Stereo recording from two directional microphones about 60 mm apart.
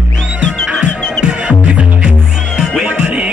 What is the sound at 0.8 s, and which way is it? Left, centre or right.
Music, centre.